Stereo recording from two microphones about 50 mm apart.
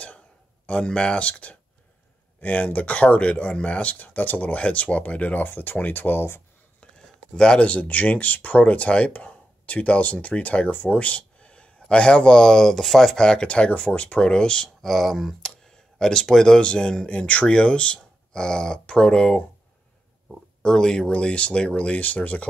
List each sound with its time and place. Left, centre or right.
0.7 s speech: left
7.3 s speech: left
14.8 s speech: centre
20.6 s speech: centre; by 22.5 s left